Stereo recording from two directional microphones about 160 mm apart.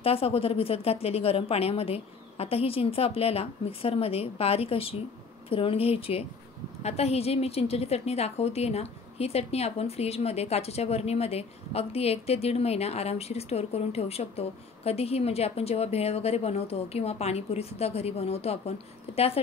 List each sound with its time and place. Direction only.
0.0 s a woman's voice: 35° left (ahead or behind)